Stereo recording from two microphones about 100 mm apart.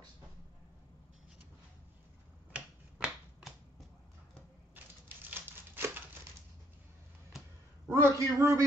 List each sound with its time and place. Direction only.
2.5 s a sound: 10° right (ahead or behind)
5.0 s crumpling: 20° right (ahead or behind)
7.9 s a man's voice: 30° right (ahead or behind)